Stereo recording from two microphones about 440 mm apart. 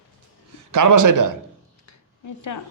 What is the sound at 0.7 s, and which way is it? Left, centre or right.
Speech, right.